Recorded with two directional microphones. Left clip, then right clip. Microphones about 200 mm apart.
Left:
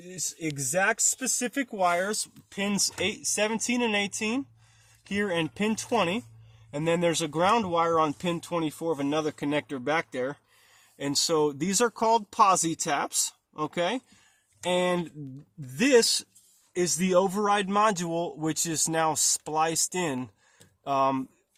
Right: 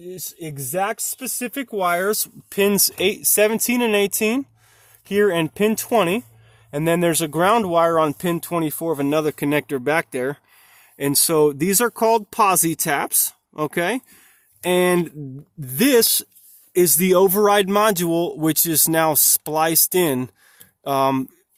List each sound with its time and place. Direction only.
0.1 s speech: 25° right (ahead or behind)
1.4 s speech: 45° right (ahead or behind)